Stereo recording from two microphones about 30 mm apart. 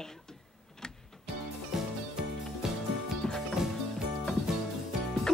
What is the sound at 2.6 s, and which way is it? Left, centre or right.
Music, centre.